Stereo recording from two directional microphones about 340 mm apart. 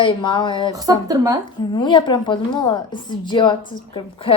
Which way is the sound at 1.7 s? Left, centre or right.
Centre.